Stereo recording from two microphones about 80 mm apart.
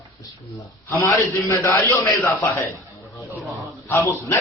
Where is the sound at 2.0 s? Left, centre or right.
Left.